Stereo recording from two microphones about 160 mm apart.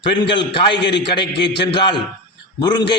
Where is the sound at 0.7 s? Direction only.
90° left.